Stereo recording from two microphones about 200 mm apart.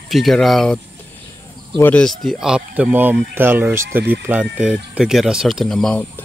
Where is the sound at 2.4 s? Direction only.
5° right (ahead or behind).